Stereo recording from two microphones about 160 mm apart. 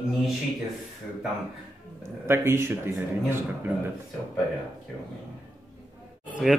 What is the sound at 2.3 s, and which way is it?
A man's voice, 15° right (ahead or behind).